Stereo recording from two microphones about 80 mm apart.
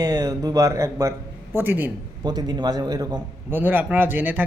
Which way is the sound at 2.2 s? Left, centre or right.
Right.